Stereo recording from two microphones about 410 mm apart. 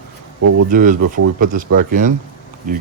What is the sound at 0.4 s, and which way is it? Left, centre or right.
Speech, right.